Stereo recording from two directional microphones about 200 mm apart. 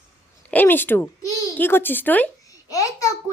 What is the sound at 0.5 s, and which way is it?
A child's voice, 10° left (ahead or behind).